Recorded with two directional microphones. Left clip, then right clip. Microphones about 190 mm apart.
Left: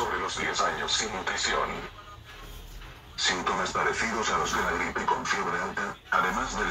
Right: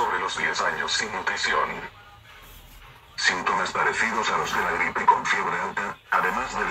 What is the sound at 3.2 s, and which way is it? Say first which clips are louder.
Speech: right 4 dB; 25° right (ahead or behind).